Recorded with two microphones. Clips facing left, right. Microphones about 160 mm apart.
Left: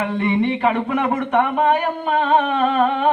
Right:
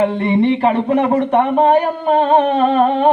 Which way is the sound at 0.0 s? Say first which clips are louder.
Right 5 dB; 35° right (ahead or behind).